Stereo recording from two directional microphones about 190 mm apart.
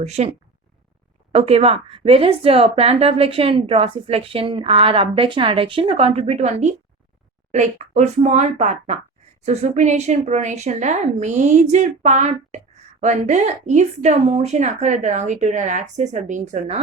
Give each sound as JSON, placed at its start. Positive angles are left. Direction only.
{"t": 0.0, "sound": "a woman's voice", "side_deg": -35}
{"t": 1.3, "sound": "a woman's voice", "side_deg": -30}